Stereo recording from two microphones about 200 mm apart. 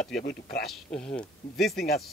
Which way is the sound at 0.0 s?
45° left (ahead or behind).